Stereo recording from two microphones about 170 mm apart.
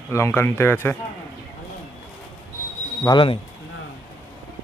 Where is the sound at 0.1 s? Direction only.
15° left (ahead or behind).